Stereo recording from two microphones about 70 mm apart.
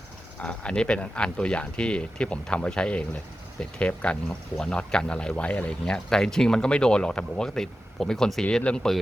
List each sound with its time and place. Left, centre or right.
0.3 s speech: centre